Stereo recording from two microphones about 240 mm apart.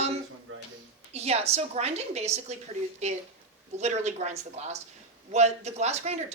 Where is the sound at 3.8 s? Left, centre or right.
Right.